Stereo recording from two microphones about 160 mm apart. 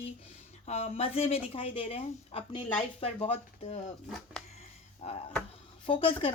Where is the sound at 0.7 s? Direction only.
40° left (ahead or behind).